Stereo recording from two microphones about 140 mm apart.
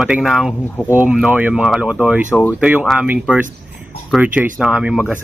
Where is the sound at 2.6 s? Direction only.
10° right (ahead or behind).